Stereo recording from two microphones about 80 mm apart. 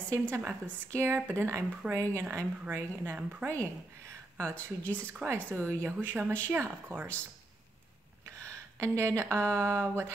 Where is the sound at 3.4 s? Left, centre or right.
Right.